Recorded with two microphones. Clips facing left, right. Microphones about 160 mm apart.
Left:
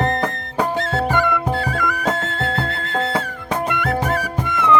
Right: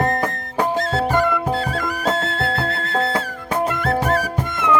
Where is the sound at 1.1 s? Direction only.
30° right (ahead or behind).